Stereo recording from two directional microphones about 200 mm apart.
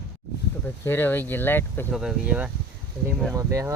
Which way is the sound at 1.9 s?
5° right (ahead or behind).